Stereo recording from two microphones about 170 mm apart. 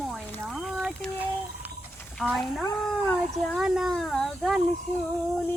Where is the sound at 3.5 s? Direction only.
Centre (ahead or behind).